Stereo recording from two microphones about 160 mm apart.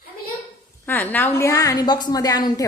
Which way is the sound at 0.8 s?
10° left (ahead or behind).